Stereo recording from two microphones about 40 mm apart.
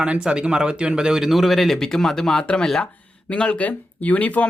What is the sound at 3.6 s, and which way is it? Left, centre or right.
Speech, left.